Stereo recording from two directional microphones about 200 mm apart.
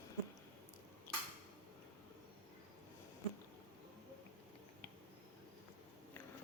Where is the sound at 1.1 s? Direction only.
10° left (ahead or behind).